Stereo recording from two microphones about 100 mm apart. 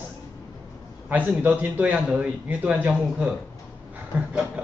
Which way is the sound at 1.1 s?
15° right (ahead or behind).